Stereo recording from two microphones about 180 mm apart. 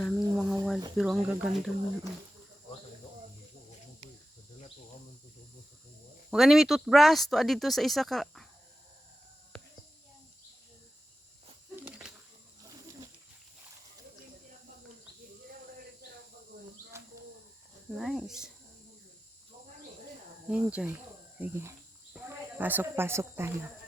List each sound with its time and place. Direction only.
0.0 s a sound: centre (ahead or behind)
0.9 s speech: centre (ahead or behind)
6.3 s speech: centre (ahead or behind)
11.8 s a sound: 10° right (ahead or behind)
12.6 s wild animals: 20° right (ahead or behind)
17.9 s speech: centre (ahead or behind)
20.5 s speech: 5° right (ahead or behind)